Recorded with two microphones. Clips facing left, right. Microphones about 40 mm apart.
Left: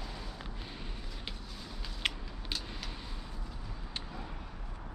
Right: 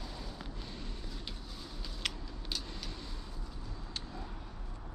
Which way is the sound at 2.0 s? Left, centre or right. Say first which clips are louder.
Left 4 dB; left.